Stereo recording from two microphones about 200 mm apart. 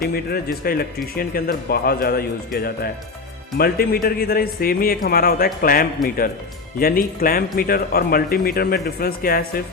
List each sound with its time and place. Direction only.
0.1 s speech: 50° left (ahead or behind)